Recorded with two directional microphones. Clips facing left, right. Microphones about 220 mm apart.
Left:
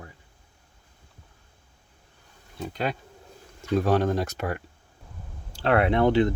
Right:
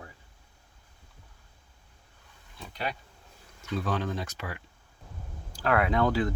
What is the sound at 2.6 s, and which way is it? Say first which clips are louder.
Speech: left 7 dB; 45° left (ahead or behind).